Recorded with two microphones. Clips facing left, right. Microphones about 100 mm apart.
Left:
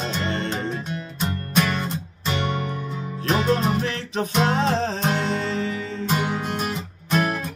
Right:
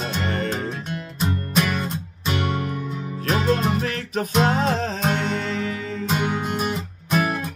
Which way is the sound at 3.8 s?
30° left (ahead or behind).